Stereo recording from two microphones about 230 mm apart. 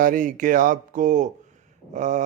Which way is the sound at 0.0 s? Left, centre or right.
Right.